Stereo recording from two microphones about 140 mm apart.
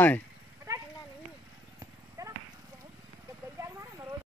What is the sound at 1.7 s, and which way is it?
Horse, 25° right (ahead or behind).